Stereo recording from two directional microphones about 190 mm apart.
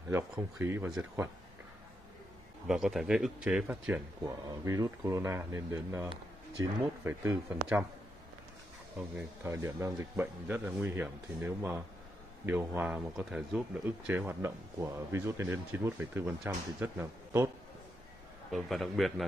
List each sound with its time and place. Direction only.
0.1 s speech: 10° right (ahead or behind)
2.6 s a man's voice: centre (ahead or behind)
4.5 s speech: 15° right (ahead or behind)
9.1 s speech: 15° right (ahead or behind)
18.5 s a man's voice: centre (ahead or behind)